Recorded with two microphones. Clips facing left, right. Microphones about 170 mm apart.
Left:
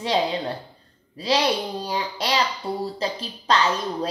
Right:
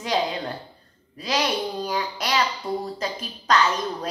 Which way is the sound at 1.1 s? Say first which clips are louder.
Left 3 dB; 30° left (ahead or behind).